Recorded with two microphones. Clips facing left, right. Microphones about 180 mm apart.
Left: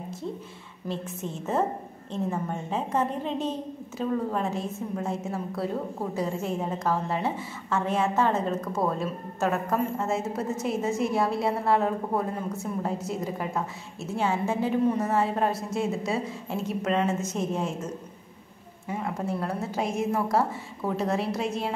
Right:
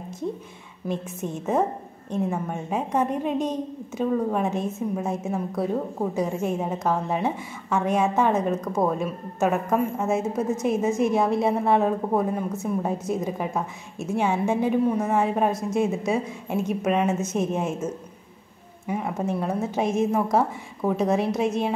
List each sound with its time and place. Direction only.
0.8 s a woman's voice: 15° right (ahead or behind)